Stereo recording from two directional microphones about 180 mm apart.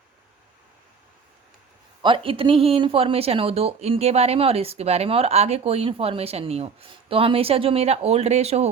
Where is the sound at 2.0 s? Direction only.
30° right (ahead or behind).